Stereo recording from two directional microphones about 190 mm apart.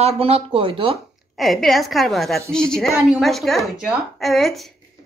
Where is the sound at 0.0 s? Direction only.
30° right (ahead or behind).